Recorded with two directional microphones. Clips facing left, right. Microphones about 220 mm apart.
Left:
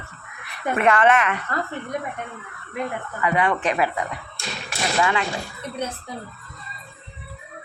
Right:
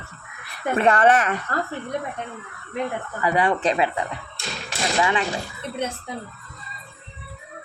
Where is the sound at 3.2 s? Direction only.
35° right (ahead or behind).